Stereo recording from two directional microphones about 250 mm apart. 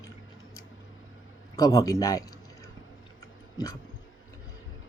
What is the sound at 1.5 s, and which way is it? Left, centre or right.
Speech, centre.